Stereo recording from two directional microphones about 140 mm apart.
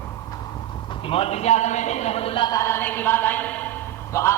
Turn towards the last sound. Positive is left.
turn(degrees=20)  # may be behind; listen again after turning